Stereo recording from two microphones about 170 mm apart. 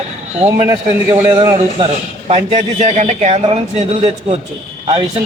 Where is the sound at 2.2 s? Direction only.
35° right (ahead or behind).